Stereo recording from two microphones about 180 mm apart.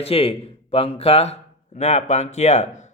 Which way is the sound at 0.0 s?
35° left (ahead or behind).